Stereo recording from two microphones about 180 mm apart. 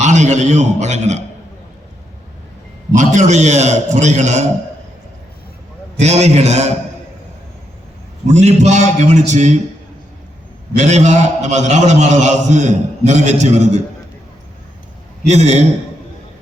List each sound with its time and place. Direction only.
0.0 s a man's voice: 40° right (ahead or behind)
2.9 s a man's voice: 45° right (ahead or behind)
6.0 s a man's voice: 40° right (ahead or behind)
8.3 s a man's voice: 40° right (ahead or behind)
10.8 s a man's voice: 40° right (ahead or behind)
15.3 s a man's voice: 35° right (ahead or behind)